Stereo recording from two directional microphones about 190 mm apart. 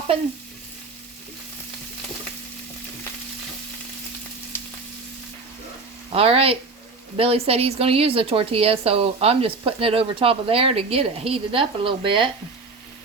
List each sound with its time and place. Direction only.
6.1 s speech: 30° right (ahead or behind)